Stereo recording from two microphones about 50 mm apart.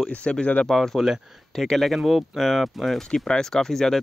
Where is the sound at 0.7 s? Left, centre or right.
Centre.